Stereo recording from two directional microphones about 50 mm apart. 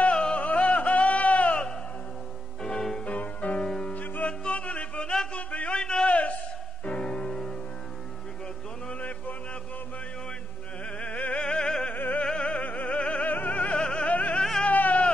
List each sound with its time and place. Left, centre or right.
0.0 s music: left
2.6 s music: centre
3.1 s music: left
3.6 s music: centre
3.9 s music: left; by 5.4 s centre
5.5 s a sound: left
6.8 s music: left
11.0 s music: left
11.9 s opera: left
12.3 s music: left
13.7 s music: centre
14.1 s music: left
14.6 s a sound: left